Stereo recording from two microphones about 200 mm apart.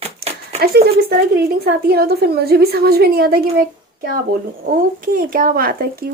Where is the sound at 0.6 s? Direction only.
50° right (ahead or behind).